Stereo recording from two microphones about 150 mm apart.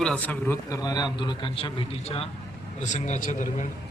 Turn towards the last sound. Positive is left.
turn(degrees=60)  # may be behind; listen again after turning